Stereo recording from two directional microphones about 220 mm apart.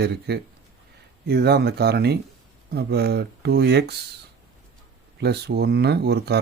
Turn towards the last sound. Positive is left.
turn(degrees=-50)  # may be behind; listen again after turning